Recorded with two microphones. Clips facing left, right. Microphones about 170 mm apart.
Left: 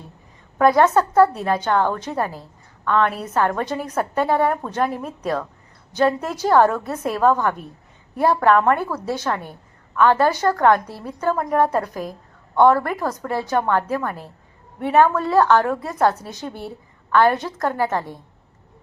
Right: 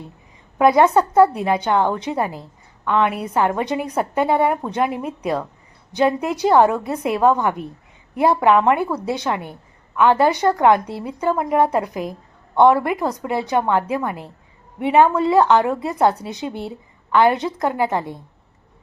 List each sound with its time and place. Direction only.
0.6 s a woman's voice: 15° right (ahead or behind)